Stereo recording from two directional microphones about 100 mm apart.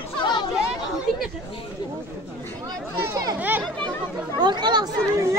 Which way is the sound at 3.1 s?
40° right (ahead or behind).